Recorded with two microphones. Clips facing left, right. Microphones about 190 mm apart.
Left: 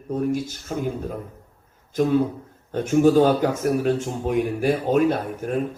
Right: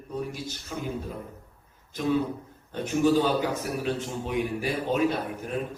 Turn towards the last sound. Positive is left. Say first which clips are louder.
# left 6 dB
turn(degrees=50)  # may be behind; listen again after turning